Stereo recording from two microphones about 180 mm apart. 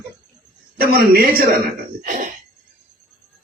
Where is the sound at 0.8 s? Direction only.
60° right (ahead or behind).